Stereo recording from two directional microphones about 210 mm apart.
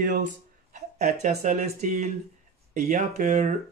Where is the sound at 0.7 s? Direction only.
35° right (ahead or behind).